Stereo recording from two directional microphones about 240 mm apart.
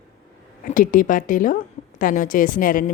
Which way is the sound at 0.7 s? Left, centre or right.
Left.